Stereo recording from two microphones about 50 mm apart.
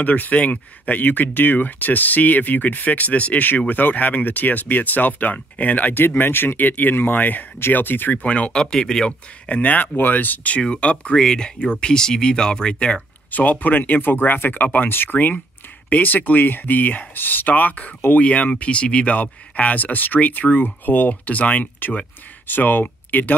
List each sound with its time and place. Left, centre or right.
0.0 s speech: left
8.1 s speech: left
8.5 s speech: centre
9.5 s speech: left
10.6 s speech: left
13.3 s speech: left